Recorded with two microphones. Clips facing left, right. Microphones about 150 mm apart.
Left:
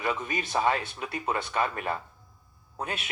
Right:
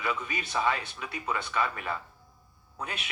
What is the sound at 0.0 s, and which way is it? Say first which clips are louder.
Speech: left 3 dB; 45° left (ahead or behind).